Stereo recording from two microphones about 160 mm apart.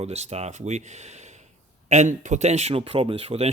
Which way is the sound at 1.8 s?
50° right (ahead or behind).